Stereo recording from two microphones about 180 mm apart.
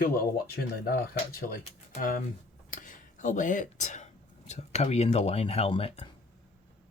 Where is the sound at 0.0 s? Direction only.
55° left (ahead or behind); by 6.1 s 35° left (ahead or behind).